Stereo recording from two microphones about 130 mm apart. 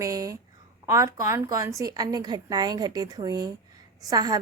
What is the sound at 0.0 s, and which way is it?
A woman's voice, 25° right (ahead or behind).